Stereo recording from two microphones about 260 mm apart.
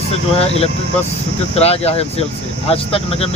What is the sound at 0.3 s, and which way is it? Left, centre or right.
Speech, left.